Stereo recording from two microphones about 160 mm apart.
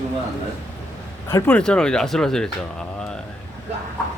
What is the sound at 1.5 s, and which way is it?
Speech, 5° left (ahead or behind).